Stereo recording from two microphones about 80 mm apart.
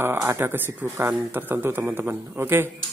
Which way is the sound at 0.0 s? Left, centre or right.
Right.